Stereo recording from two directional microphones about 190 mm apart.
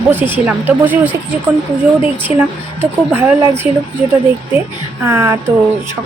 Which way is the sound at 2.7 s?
10° right (ahead or behind).